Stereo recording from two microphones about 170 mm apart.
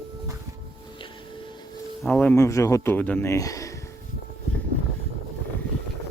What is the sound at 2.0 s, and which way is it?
Speech, 10° left (ahead or behind).